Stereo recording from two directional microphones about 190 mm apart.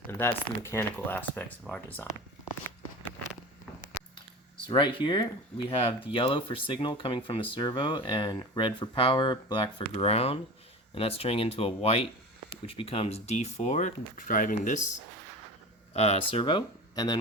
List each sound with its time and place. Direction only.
0.1 s speech: 10° left (ahead or behind)
4.7 s speech: 25° left (ahead or behind); by 14.8 s 45° left (ahead or behind)
15.9 s speech: 35° left (ahead or behind)